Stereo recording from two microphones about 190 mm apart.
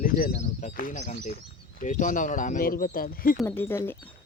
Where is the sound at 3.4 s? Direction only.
10° left (ahead or behind).